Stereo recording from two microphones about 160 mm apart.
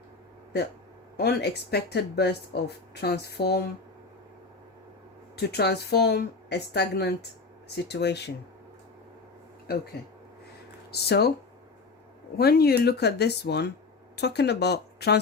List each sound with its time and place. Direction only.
1.1 s speech: 90° left
5.4 s speech: 90° left
9.7 s speech: 75° left (ahead or behind)
10.9 s speech: 85° left
12.4 s speech: 80° left